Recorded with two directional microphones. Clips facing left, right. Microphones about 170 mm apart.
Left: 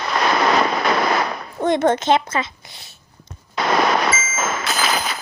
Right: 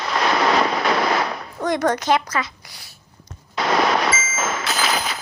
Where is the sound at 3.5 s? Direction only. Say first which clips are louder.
Left 1 dB; 50° left (ahead or behind).